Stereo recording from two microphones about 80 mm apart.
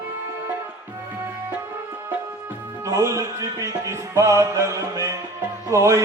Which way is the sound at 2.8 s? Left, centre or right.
Right.